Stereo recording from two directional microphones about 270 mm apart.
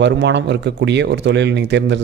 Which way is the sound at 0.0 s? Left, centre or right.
Right.